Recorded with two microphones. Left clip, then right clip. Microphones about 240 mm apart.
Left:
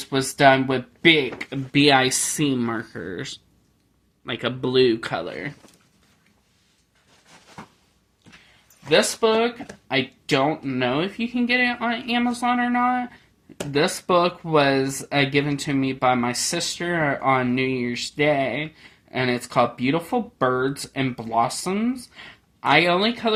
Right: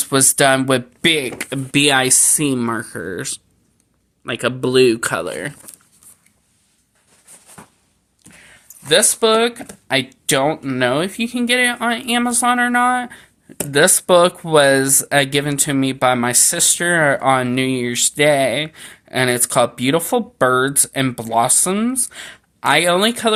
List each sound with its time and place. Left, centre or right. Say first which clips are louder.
0.0 s speech: right 2 dB; right
8.9 s speech: right 4 dB; right